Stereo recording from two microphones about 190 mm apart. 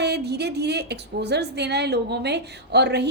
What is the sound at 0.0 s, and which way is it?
A woman's voice, 60° right (ahead or behind).